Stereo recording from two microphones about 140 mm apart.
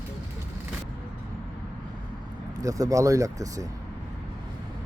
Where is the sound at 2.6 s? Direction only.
25° right (ahead or behind).